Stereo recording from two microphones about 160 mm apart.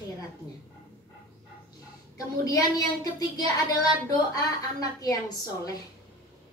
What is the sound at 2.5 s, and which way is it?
A woman's voice, 25° left (ahead or behind).